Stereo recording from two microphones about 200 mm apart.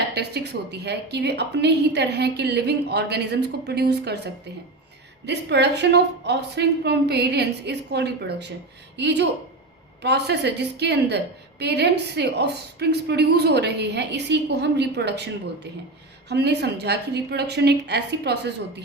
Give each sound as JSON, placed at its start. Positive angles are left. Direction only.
{"t": 0.1, "sound": "a woman's voice", "side_deg": -55}
{"t": 16.3, "sound": "a woman's voice", "side_deg": -55}